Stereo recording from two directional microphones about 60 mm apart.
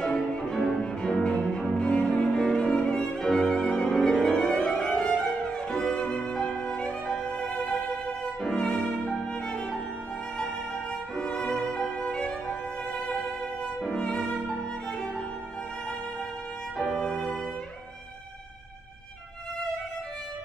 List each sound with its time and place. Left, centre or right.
0.0 s music: centre
1.0 s cello: centre
2.3 s violin: centre
5.0 s music: centre
8.4 s violin: centre
9.3 s music: centre
11.1 s violin: centre
13.7 s music: centre